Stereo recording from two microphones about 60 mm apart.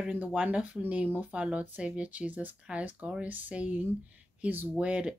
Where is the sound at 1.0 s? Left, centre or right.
Right.